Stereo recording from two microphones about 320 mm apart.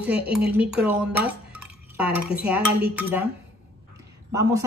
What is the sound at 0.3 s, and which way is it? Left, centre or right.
Speech, centre.